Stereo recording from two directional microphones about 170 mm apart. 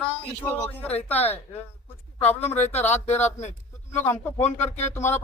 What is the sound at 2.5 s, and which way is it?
Speech, 40° left (ahead or behind).